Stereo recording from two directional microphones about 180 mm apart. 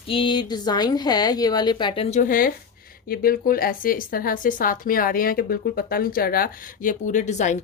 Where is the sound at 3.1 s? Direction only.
55° left (ahead or behind).